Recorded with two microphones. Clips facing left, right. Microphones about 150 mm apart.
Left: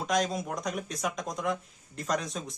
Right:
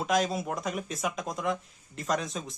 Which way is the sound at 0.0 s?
5° right (ahead or behind).